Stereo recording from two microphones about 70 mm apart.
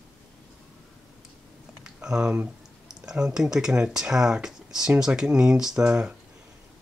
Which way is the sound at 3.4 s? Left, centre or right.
Centre.